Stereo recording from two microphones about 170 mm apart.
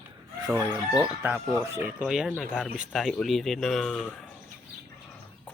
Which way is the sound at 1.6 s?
15° right (ahead or behind).